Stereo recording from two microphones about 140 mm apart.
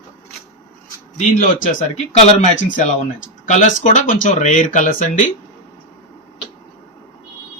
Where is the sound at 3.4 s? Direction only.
60° left (ahead or behind).